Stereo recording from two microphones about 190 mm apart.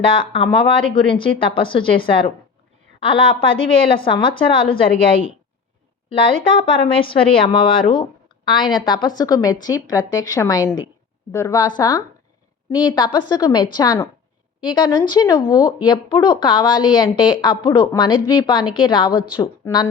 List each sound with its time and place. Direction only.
0.1 s speech: 25° left (ahead or behind)
6.6 s speech: 30° left (ahead or behind)